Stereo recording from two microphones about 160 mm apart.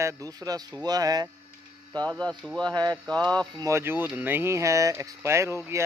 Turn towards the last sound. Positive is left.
turn(degrees=-15)  # may be behind; listen again after turning